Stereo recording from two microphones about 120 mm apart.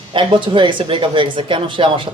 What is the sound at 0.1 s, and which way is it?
A man's voice, 45° right (ahead or behind).